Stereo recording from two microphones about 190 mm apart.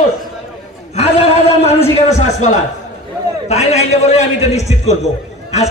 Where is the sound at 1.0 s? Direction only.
35° left (ahead or behind).